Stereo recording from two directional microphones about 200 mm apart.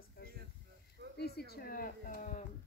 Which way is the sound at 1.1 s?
55° left (ahead or behind).